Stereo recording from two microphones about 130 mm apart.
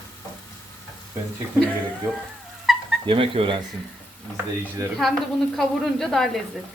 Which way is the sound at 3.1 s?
45° right (ahead or behind).